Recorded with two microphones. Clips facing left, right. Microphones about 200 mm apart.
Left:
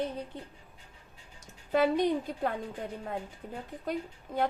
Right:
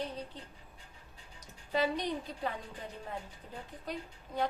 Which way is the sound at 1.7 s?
50° left (ahead or behind).